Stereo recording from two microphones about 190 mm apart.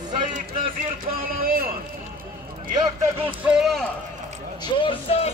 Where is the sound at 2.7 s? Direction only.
20° right (ahead or behind).